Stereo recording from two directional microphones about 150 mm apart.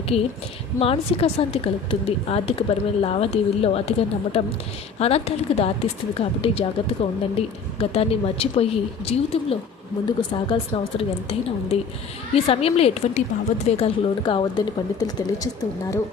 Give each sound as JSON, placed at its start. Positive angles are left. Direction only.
{"t": 0.1, "sound": "a woman's voice", "side_deg": 40}
{"t": 10.1, "sound": "a woman's voice", "side_deg": 30}